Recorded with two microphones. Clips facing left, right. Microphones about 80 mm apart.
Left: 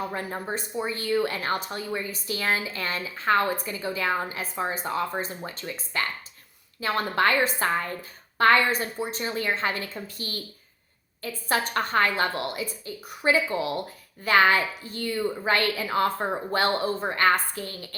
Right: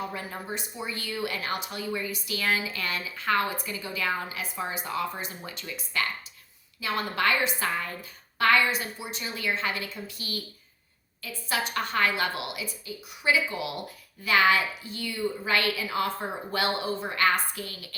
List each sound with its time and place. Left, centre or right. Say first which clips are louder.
0.1 s speech: left 4 dB; left